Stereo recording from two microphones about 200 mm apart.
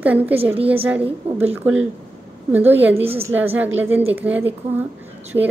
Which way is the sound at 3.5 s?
10° right (ahead or behind).